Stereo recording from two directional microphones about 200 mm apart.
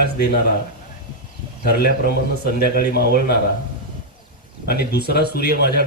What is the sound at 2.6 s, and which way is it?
Speech, 50° left (ahead or behind).